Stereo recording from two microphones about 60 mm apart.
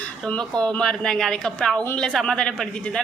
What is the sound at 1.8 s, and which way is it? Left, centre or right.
Speech, centre.